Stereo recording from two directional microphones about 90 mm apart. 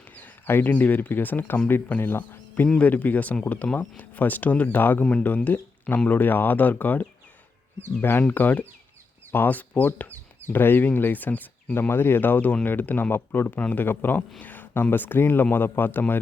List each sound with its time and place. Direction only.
0.2 s speech: 20° left (ahead or behind)
8.3 s speech: 20° left (ahead or behind)